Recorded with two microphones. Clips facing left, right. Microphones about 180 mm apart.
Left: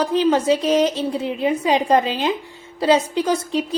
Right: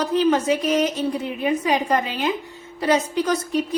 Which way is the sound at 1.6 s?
25° left (ahead or behind).